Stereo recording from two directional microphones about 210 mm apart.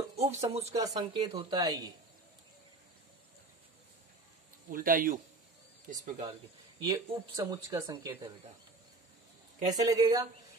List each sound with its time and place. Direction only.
0.1 s speech: 30° right (ahead or behind)
0.7 s a woman's voice: 15° right (ahead or behind)
4.6 s speech: 40° right (ahead or behind)
7.1 s speech: 15° right (ahead or behind)
9.7 s speech: 15° right (ahead or behind)